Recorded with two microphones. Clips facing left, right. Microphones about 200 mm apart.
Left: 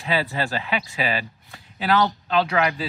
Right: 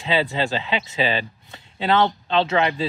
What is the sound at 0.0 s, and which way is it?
Speech, 20° right (ahead or behind).